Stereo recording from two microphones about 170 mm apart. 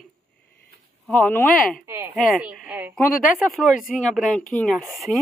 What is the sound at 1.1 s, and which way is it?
Speech, 10° left (ahead or behind).